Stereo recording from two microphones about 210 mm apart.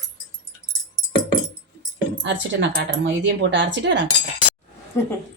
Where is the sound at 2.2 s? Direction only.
55° right (ahead or behind).